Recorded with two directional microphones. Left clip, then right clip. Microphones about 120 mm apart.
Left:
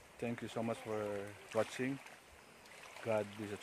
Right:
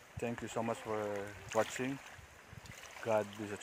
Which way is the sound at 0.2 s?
5° left (ahead or behind).